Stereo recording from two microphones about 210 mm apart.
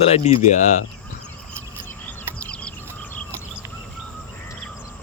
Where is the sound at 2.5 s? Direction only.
5° left (ahead or behind).